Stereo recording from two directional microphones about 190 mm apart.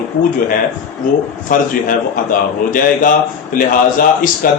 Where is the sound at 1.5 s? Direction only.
45° left (ahead or behind).